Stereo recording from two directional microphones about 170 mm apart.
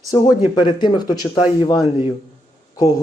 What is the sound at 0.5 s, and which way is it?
Speech, 25° left (ahead or behind).